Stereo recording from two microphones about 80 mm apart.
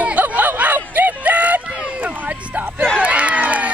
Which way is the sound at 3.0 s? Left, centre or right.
Centre.